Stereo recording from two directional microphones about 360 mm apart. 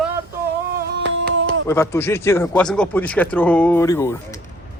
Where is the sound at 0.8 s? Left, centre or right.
Right.